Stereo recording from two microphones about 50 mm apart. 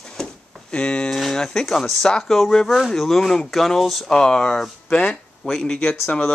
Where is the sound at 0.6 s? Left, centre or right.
Left.